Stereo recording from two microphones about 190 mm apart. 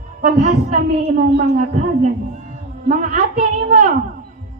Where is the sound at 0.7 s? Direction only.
40° right (ahead or behind).